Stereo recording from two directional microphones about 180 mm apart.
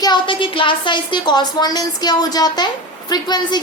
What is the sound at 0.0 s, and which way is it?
A woman's voice, 25° left (ahead or behind).